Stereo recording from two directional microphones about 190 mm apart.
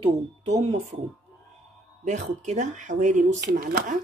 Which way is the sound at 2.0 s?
40° right (ahead or behind).